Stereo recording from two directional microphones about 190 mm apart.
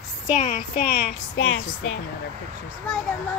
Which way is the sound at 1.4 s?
90° left.